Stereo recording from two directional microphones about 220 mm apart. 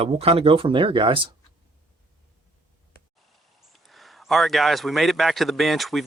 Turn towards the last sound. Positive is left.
turn(degrees=0)  # may be behind; listen again after turning